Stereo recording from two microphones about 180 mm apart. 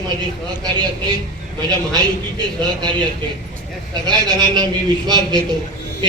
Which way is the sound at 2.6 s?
25° right (ahead or behind).